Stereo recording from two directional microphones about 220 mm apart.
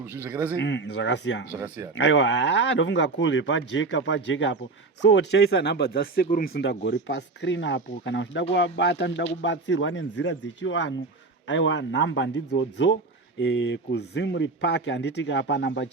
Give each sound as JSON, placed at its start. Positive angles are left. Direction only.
{"t": 0.0, "sound": "speech", "side_deg": -10}
{"t": 0.6, "sound": "speech", "side_deg": 55}
{"t": 1.5, "sound": "speech", "side_deg": -5}
{"t": 2.0, "sound": "speech", "side_deg": 55}